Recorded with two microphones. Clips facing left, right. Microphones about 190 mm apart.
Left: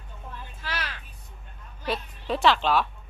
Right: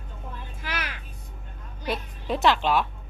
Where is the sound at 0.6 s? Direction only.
10° right (ahead or behind).